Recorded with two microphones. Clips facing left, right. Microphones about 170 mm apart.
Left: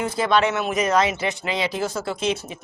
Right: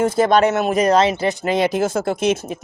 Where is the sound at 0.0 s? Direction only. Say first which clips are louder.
Right 6 dB; 45° right (ahead or behind).